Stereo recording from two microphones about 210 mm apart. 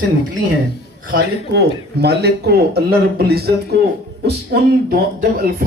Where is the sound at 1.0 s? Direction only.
45° right (ahead or behind).